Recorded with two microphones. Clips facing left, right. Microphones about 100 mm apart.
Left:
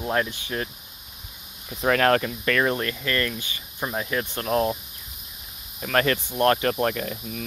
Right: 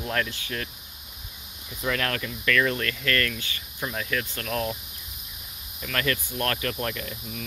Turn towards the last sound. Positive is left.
turn(degrees=45)  # may be behind; listen again after turning